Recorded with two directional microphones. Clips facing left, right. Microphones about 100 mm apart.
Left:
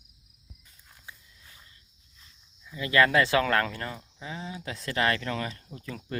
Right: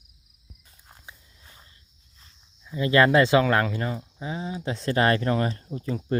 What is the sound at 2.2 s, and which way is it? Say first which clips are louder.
Speech: right 1 dB; 30° right (ahead or behind).